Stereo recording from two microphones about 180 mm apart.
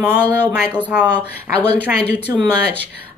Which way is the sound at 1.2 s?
10° left (ahead or behind).